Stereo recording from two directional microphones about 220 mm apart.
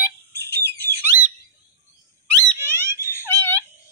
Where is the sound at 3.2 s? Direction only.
10° left (ahead or behind).